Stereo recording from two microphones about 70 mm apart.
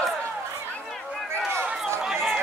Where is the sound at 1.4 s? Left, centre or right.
Right.